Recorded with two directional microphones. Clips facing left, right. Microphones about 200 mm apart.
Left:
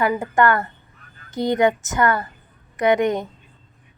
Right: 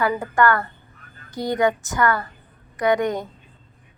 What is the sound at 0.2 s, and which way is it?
A woman's voice, 20° left (ahead or behind).